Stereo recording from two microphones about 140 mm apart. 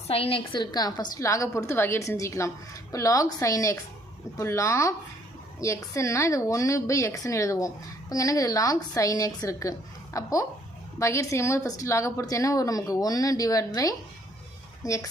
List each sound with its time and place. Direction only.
0.1 s a woman's voice: 45° left (ahead or behind); by 15.1 s 20° left (ahead or behind)